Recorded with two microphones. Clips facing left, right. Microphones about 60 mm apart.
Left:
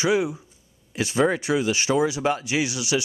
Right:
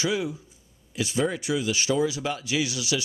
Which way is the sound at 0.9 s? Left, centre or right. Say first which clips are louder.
Left 5 dB; left.